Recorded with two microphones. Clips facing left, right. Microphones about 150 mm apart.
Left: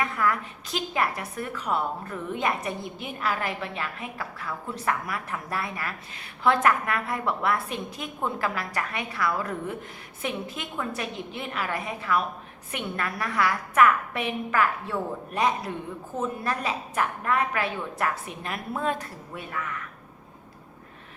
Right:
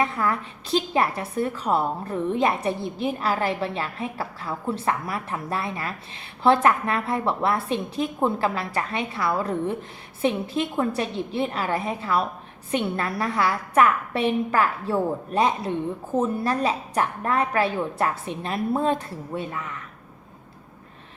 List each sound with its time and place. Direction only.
0.0 s a woman's voice: 30° right (ahead or behind)